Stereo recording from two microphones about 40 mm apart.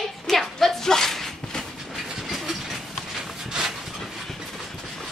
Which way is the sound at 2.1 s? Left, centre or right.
Centre.